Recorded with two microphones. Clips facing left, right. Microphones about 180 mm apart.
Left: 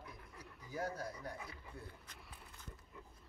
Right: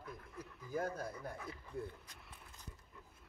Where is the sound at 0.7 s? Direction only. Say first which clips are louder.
Right 2 dB; 50° right (ahead or behind).